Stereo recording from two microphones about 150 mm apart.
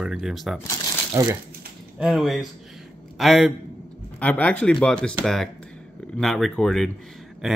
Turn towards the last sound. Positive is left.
turn(degrees=0)  # may be behind; listen again after turning